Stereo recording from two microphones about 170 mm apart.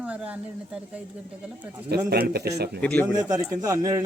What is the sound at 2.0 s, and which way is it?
Speech, 65° right (ahead or behind).